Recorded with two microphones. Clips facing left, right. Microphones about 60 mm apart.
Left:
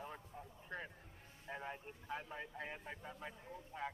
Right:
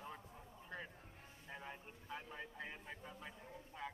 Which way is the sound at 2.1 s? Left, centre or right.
Left.